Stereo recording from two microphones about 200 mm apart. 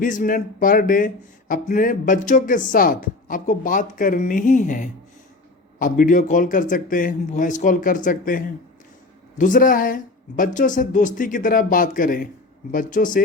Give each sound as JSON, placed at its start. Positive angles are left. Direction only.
{"t": 0.0, "sound": "speech", "side_deg": 40}